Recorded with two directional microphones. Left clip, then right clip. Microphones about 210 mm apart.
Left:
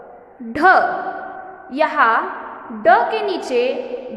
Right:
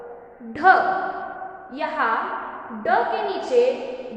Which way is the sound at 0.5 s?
50° left (ahead or behind).